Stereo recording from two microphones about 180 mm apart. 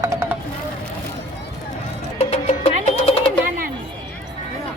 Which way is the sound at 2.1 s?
35° left (ahead or behind).